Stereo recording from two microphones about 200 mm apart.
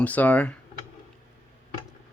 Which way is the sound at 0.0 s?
5° left (ahead or behind).